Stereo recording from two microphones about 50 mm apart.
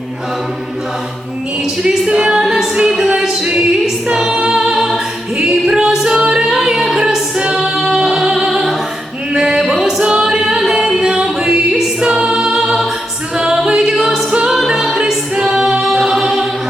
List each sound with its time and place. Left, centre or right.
1.6 s music: centre
3.2 s a capella: centre
3.8 s choir: centre
5.4 s music: centre
9.3 s a sound: centre
10.0 s singing: centre
10.6 s music: centre
14.7 s a capella: centre